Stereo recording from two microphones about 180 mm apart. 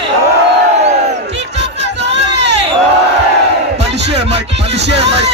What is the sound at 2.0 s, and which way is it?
Hubbub, 75° right (ahead or behind).